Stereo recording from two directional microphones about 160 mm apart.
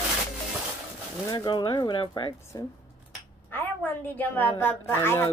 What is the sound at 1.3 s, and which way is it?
Speech, 30° left (ahead or behind).